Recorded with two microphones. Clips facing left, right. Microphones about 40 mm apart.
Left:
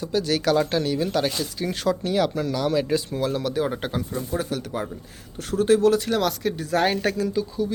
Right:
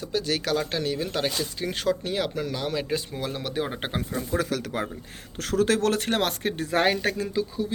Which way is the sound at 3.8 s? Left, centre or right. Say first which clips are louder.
Left 2 dB; right.